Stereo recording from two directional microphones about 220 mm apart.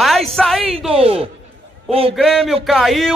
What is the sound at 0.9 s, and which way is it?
Speech, 25° right (ahead or behind).